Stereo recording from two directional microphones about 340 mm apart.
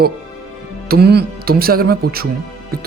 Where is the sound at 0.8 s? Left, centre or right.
Right.